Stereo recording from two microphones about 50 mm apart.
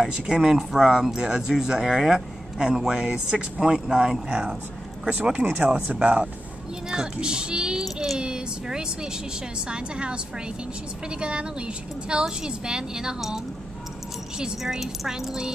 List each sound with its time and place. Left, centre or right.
0.0 s a woman's voice: centre
14.6 s speech: centre